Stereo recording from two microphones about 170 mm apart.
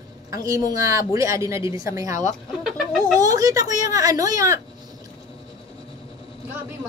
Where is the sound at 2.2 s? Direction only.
Centre (ahead or behind).